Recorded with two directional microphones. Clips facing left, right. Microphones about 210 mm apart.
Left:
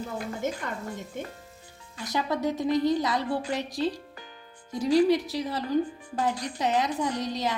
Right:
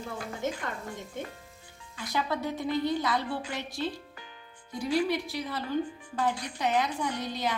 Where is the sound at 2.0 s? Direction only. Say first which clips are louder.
Left 3 dB; 40° left (ahead or behind).